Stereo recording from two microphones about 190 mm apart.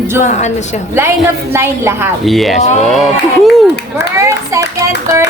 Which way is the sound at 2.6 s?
40° left (ahead or behind).